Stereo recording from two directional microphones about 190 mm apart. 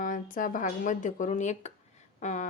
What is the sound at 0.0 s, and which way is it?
Speech, 45° left (ahead or behind).